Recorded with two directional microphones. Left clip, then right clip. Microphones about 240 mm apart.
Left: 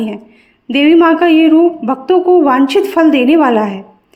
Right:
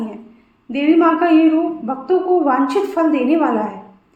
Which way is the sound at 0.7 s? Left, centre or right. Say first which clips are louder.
Left 6 dB; left.